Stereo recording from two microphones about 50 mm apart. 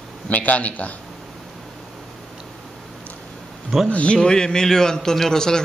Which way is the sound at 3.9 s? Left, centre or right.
Left.